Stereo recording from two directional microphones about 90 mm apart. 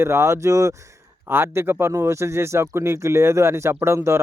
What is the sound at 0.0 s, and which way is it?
Speech, 30° right (ahead or behind).